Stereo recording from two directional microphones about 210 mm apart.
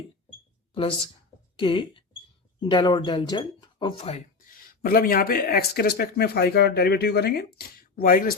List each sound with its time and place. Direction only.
0.7 s a woman's voice: 25° left (ahead or behind); by 8.4 s 45° left (ahead or behind)